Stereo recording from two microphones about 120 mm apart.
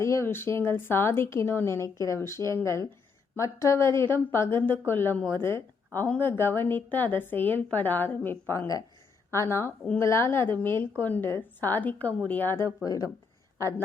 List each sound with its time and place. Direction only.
0.0 s a woman's voice: 25° left (ahead or behind)